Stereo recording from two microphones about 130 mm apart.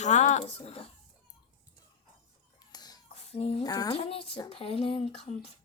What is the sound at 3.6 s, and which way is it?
Speech, 30° left (ahead or behind).